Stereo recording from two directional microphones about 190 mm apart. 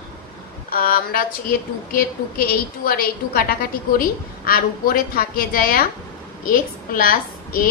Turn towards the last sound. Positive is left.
turn(degrees=50)  # may be behind; listen again after turning